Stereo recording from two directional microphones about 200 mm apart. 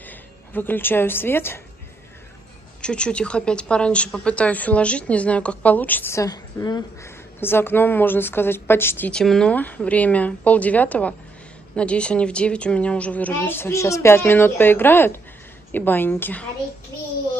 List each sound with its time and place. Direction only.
0.0 s a woman's voice: 10° left (ahead or behind)
2.8 s a woman's voice: 5° left (ahead or behind)